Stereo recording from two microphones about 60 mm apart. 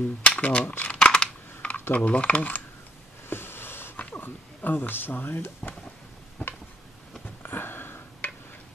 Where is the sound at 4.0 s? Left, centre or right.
Left.